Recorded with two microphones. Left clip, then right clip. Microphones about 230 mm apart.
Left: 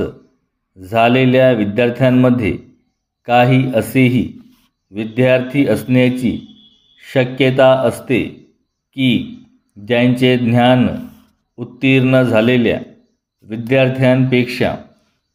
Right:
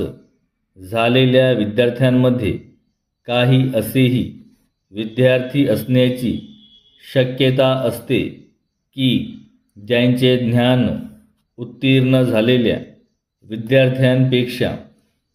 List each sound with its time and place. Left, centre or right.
0.8 s a man's voice: centre